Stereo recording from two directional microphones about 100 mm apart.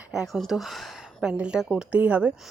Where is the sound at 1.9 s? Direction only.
15° right (ahead or behind).